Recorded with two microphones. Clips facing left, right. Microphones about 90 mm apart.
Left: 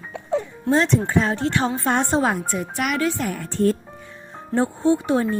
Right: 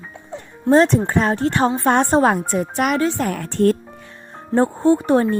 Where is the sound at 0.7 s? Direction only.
45° right (ahead or behind).